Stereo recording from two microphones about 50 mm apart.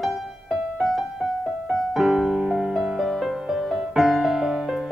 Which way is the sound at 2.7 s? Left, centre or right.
Centre.